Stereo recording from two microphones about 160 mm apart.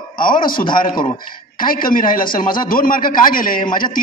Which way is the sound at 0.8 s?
25° left (ahead or behind).